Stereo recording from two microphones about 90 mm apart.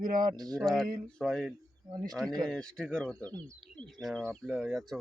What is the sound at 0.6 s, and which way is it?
Speech, 5° right (ahead or behind).